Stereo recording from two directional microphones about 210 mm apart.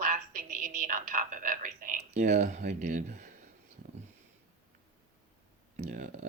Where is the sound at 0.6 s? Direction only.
40° right (ahead or behind).